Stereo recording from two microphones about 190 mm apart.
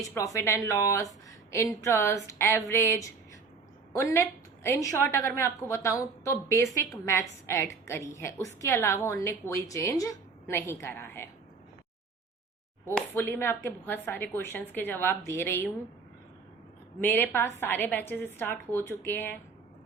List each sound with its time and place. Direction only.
0.1 s a woman's voice: 15° left (ahead or behind)
12.9 s a woman's voice: 10° left (ahead or behind)
17.0 s a woman's voice: 10° left (ahead or behind)